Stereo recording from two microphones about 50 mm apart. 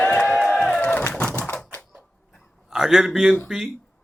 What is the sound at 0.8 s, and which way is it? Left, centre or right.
Bird, left.